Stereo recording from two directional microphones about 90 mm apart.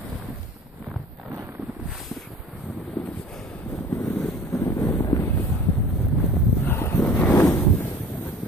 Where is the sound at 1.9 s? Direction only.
Centre (ahead or behind).